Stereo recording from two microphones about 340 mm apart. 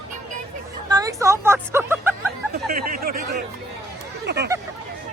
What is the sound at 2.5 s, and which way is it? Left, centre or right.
Speech, right.